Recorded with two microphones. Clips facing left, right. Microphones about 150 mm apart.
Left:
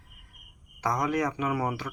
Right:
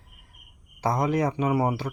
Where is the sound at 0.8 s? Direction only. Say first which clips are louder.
Right 3 dB; 30° right (ahead or behind).